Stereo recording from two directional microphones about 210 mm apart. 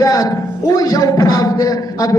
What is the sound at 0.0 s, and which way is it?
A man's voice, 15° left (ahead or behind).